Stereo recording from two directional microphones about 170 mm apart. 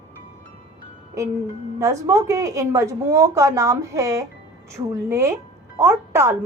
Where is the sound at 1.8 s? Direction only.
20° right (ahead or behind).